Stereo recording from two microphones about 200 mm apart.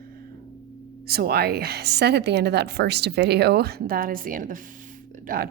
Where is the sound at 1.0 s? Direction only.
50° right (ahead or behind).